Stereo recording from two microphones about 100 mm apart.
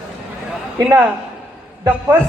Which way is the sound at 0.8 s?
30° right (ahead or behind).